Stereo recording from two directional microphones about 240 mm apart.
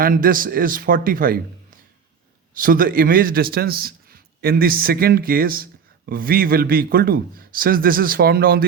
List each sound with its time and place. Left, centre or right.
0.0 s a man's voice: right
2.6 s a man's voice: right